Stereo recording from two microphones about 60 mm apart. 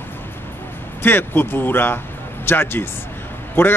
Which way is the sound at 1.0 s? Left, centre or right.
Left.